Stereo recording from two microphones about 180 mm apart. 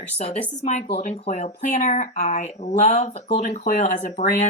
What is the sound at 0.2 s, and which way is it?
Speech, 35° left (ahead or behind).